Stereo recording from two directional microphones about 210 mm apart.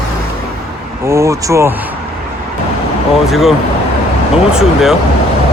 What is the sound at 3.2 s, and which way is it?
Speech, centre (ahead or behind).